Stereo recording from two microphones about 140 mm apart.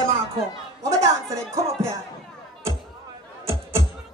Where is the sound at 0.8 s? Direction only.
25° right (ahead or behind).